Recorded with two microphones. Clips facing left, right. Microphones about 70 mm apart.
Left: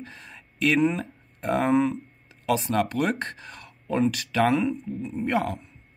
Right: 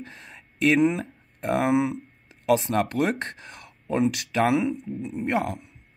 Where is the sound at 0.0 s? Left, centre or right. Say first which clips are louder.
Even; right.